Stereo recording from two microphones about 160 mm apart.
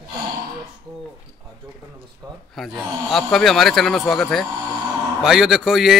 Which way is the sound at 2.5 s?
Centre (ahead or behind).